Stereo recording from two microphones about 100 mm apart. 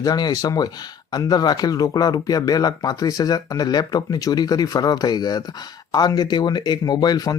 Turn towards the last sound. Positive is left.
turn(degrees=40)  # may be behind; listen again after turning